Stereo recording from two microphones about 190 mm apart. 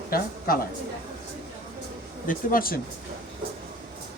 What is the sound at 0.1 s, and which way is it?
Speech, 50° left (ahead or behind).